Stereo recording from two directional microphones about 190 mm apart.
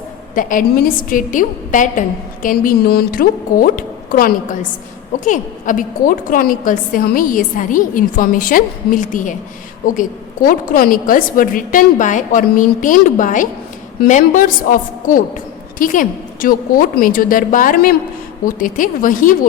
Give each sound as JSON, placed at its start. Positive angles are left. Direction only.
{"t": 0.3, "sound": "a woman's voice", "side_deg": 45}